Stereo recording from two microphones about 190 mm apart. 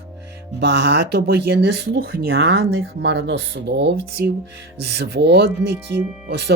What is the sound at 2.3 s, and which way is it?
Speech, 75° right (ahead or behind).